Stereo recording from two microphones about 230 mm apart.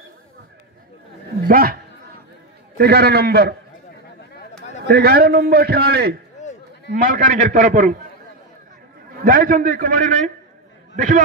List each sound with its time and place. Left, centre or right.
1.5 s a man's voice: right
2.8 s a man's voice: right
4.8 s a man's voice: right
6.4 s a sound: left
6.9 s a man's voice: right
9.1 s a man's voice: right